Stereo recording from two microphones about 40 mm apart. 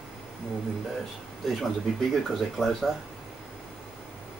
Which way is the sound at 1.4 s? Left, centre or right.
Centre.